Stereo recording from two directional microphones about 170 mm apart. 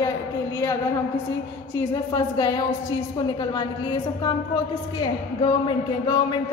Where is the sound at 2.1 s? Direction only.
20° left (ahead or behind).